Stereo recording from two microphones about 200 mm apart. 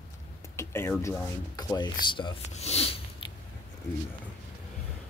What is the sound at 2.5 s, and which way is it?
Speech, 30° left (ahead or behind).